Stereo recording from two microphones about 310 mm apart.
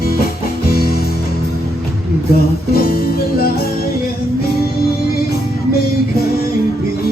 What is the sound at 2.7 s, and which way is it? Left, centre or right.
Music, left.